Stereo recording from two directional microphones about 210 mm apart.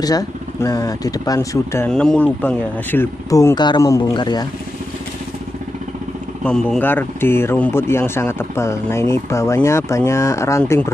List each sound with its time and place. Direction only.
0.0 s speech: 15° left (ahead or behind)
6.4 s speech: 5° left (ahead or behind)